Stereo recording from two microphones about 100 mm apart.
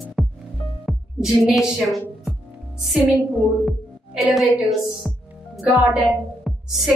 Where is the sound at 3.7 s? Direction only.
Centre (ahead or behind).